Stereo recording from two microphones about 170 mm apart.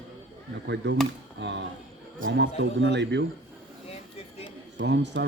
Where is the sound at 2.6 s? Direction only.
90° right.